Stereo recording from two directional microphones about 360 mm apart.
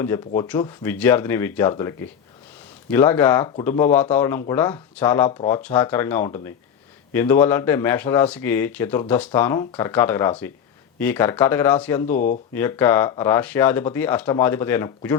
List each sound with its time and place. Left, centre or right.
0.0 s speech: centre
12.0 s speech: left
12.5 s speech: centre